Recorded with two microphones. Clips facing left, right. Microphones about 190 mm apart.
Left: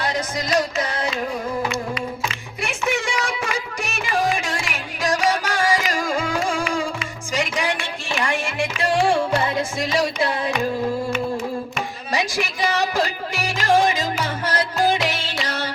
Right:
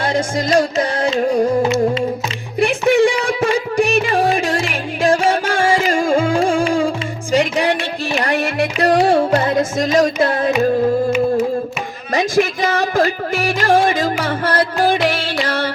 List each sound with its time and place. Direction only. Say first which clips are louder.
0.0 s music: right 7 dB; 30° right (ahead or behind)
8.4 s music: right 7 dB; 60° right (ahead or behind)
12.1 s music: right 9 dB; 50° right (ahead or behind)